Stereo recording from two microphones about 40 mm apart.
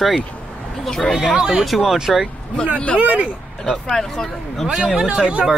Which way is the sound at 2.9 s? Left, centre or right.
Right.